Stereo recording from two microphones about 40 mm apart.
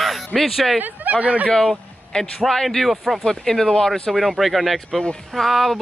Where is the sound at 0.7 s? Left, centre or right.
Right.